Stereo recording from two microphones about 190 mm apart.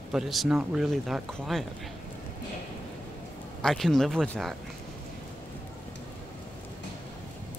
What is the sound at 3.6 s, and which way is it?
Speech, centre (ahead or behind).